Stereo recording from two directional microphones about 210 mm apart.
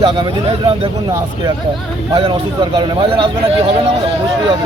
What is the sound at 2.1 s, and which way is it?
A man's voice, 25° right (ahead or behind).